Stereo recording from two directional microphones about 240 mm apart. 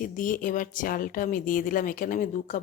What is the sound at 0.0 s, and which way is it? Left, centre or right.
Speech, left.